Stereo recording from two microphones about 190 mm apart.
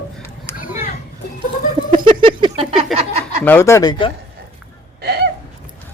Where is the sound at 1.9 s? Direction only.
25° right (ahead or behind).